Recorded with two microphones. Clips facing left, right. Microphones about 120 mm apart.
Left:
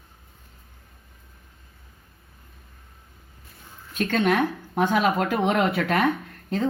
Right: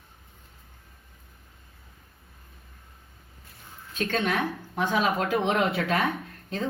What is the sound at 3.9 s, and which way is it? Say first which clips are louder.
Speech: left 5 dB; 60° left (ahead or behind).